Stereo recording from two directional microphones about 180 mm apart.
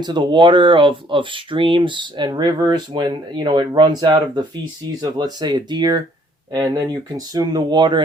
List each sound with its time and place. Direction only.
0.0 s speech: 25° right (ahead or behind)